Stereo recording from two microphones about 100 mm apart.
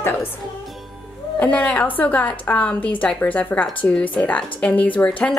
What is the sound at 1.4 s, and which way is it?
A woman's voice, 15° left (ahead or behind).